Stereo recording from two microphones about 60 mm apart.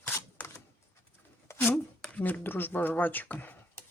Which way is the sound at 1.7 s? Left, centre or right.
Left.